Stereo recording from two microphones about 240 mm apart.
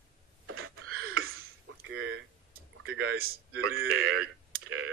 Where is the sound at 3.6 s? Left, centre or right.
Right.